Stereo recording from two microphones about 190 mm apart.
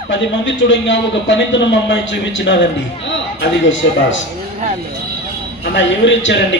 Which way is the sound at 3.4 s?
80° left.